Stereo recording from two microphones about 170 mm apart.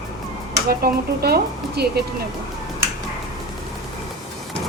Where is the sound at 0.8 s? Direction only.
65° right (ahead or behind).